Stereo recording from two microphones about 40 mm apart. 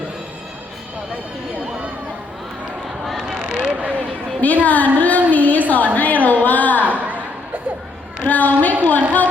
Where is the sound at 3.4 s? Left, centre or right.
Right.